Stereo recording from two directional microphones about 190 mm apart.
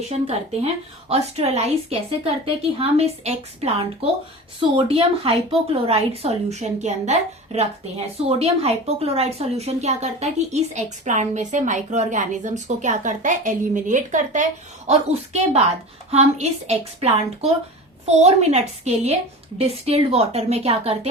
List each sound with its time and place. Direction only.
0.1 s speech: 35° right (ahead or behind)